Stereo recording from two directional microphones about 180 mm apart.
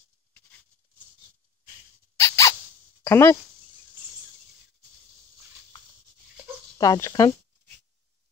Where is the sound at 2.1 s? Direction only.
15° left (ahead or behind).